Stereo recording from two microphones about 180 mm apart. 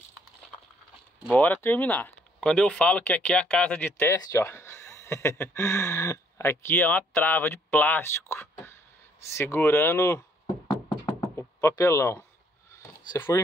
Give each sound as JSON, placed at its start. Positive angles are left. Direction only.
{"t": 1.3, "sound": "speech", "side_deg": 10}
{"t": 9.3, "sound": "knock", "side_deg": 15}
{"t": 13.1, "sound": "speech", "side_deg": 15}